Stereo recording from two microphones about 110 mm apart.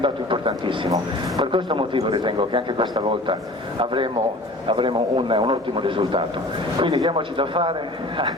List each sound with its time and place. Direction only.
0.0 s speech: 50° right (ahead or behind)
6.7 s speech: 40° right (ahead or behind)